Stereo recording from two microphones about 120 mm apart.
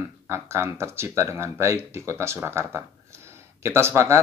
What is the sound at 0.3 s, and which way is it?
Speech, 20° right (ahead or behind).